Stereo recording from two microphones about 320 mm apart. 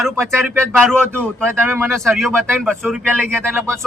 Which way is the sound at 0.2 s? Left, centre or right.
Centre.